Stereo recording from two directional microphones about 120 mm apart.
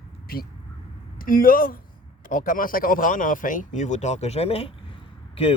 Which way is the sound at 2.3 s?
90° left.